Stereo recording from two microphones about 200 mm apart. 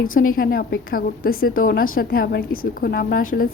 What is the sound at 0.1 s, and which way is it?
A woman's voice, 45° left (ahead or behind).